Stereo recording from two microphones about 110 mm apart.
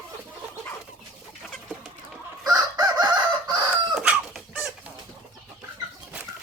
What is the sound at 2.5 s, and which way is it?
Chicken, 35° right (ahead or behind).